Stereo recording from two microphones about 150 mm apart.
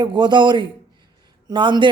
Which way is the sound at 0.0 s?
30° right (ahead or behind).